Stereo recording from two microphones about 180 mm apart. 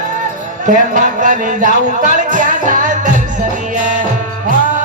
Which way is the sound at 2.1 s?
45° right (ahead or behind).